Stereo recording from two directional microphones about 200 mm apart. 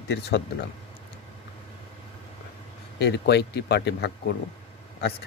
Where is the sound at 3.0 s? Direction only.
60° left (ahead or behind).